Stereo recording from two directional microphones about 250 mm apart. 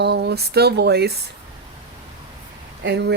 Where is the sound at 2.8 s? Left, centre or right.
Right.